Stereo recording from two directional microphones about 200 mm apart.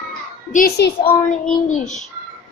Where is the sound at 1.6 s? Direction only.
35° left (ahead or behind).